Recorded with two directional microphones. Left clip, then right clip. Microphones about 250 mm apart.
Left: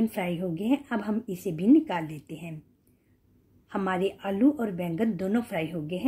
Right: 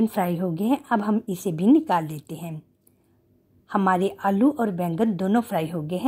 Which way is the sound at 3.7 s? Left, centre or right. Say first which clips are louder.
Right 7 dB; right.